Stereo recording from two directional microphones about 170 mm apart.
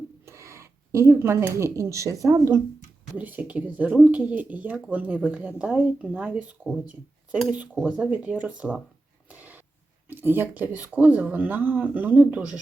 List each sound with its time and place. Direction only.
0.3 s speech: 15° right (ahead or behind)
3.2 s speech: 10° right (ahead or behind)
9.3 s a sound: 10° right (ahead or behind)
10.1 s speech: 10° right (ahead or behind)